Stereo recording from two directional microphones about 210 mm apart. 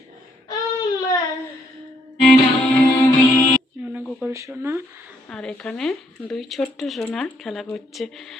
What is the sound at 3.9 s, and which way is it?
Speech, 10° right (ahead or behind).